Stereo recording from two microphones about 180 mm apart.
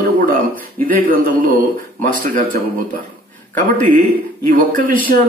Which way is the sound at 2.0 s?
50° right (ahead or behind).